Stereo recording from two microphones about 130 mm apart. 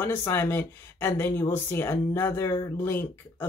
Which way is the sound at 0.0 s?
20° left (ahead or behind).